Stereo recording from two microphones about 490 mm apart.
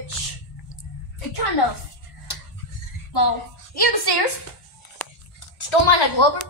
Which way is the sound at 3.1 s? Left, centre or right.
Left.